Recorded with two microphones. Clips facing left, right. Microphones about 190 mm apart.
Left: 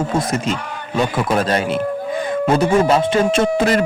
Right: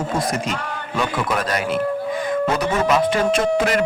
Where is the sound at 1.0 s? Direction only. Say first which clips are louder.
Left 5 dB; 30° left (ahead or behind).